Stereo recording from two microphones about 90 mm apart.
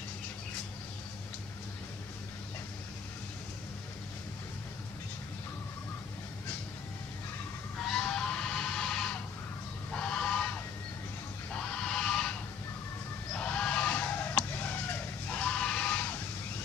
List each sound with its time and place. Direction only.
7.9 s music: 5° left (ahead or behind)
9.9 s goose: 10° left (ahead or behind)
11.5 s a sound: 10° left (ahead or behind)
15.3 s music: 10° left (ahead or behind)